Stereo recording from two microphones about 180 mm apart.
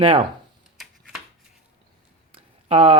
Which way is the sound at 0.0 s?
30° right (ahead or behind).